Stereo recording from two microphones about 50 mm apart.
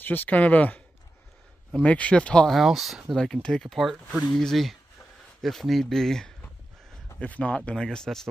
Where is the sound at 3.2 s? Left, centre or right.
Centre.